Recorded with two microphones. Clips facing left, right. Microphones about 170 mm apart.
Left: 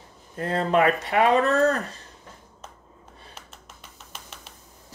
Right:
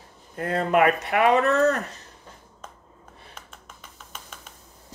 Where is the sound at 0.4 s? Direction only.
30° left (ahead or behind).